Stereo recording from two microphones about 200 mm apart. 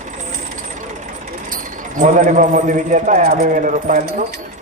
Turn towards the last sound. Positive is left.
turn(degrees=-40)  # may be behind; listen again after turning